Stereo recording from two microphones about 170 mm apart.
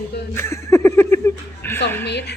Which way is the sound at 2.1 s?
80° left.